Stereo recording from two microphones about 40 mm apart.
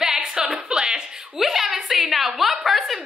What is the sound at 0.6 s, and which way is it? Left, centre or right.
Music, centre.